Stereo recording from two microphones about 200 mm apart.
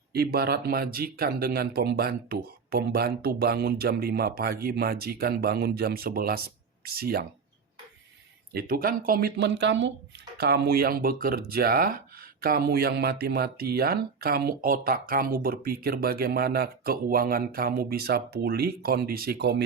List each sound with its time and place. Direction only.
0.1 s speech: 50° right (ahead or behind)
8.5 s speech: 50° right (ahead or behind)